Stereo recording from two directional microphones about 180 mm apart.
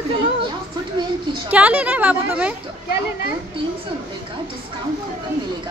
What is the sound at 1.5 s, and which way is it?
Speech, 10° right (ahead or behind).